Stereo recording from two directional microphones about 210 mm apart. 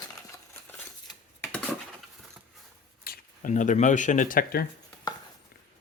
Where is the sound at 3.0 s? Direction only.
40° left (ahead or behind).